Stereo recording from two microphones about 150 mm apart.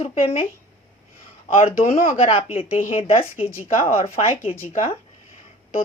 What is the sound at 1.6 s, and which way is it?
A woman's voice, 45° left (ahead or behind).